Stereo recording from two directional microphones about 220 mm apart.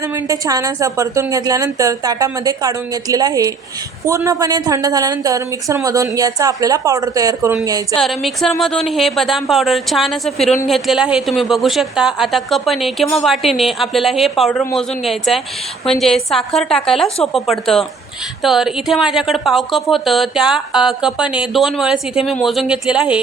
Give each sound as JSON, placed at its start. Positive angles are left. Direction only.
{"t": 0.3, "sound": "a woman's voice", "side_deg": -15}
{"t": 7.9, "sound": "a woman's voice", "side_deg": 0}